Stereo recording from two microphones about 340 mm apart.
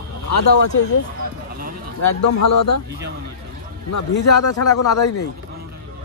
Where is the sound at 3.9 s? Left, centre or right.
Left.